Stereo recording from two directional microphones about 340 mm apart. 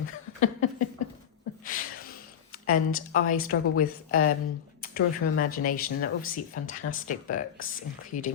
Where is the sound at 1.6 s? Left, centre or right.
Left.